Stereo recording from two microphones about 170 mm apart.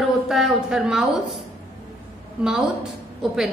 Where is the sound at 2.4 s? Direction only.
5° right (ahead or behind).